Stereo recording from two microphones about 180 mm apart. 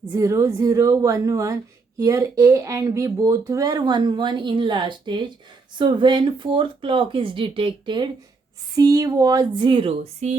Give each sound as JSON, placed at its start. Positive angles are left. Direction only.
{"t": 0.1, "sound": "a woman's voice", "side_deg": -15}